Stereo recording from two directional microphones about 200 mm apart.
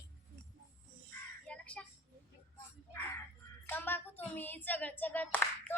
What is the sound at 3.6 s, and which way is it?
Child singing, 10° left (ahead or behind).